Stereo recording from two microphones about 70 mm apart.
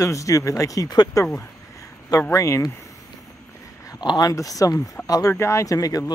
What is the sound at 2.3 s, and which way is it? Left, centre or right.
Speech, left.